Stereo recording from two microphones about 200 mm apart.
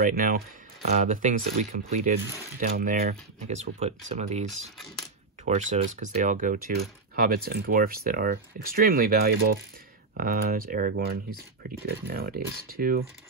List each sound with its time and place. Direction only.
0.0 s speech: 45° right (ahead or behind)
3.4 s speech: 30° right (ahead or behind)
4.5 s speech: centre (ahead or behind)
5.4 s speech: 35° right (ahead or behind)